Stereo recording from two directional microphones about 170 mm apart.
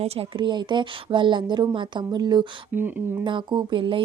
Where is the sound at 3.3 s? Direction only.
30° right (ahead or behind).